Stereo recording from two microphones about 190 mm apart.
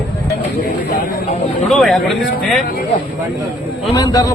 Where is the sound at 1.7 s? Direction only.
Centre (ahead or behind).